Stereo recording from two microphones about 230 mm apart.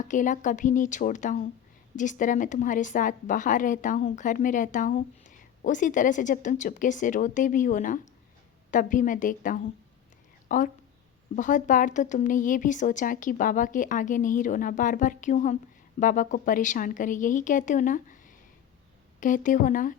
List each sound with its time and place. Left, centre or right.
0.0 s a woman's voice: left